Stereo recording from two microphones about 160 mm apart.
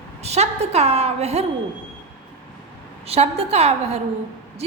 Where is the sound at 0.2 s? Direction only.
40° right (ahead or behind).